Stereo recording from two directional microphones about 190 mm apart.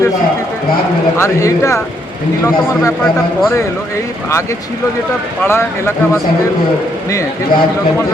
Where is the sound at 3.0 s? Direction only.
15° left (ahead or behind).